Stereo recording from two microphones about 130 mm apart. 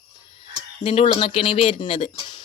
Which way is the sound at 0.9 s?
45° left (ahead or behind).